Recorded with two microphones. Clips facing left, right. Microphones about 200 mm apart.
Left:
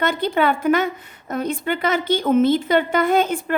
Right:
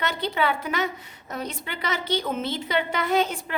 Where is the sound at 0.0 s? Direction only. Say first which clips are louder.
Left 6 dB; 50° left (ahead or behind).